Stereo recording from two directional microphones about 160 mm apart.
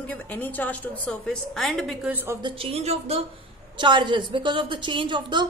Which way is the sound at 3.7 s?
30° right (ahead or behind).